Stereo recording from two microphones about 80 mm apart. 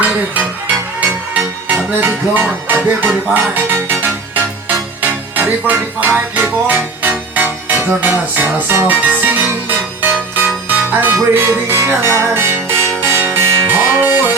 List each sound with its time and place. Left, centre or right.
1.3 s music: right
5.3 s music: right